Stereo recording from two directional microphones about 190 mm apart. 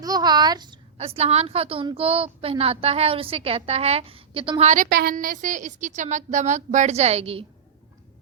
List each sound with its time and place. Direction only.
0.0 s a woman's voice: 20° right (ahead or behind)